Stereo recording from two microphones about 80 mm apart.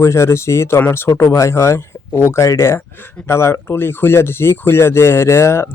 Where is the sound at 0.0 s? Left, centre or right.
Left.